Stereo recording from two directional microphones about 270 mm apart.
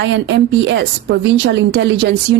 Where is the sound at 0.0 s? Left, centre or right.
Right.